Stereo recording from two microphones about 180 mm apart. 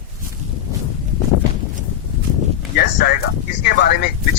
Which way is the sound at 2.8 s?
55° left (ahead or behind).